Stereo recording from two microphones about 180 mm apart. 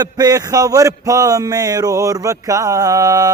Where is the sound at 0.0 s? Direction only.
20° right (ahead or behind).